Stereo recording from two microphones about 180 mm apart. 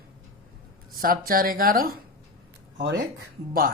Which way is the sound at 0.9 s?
55° right (ahead or behind).